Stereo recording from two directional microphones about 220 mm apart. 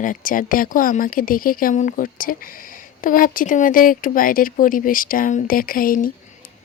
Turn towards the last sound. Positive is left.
turn(degrees=40)  # may be behind; listen again after turning